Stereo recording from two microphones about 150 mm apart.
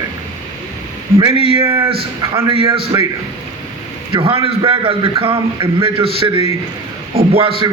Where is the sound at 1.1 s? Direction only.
35° right (ahead or behind).